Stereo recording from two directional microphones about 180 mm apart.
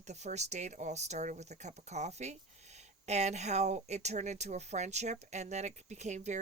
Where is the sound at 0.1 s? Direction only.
40° right (ahead or behind).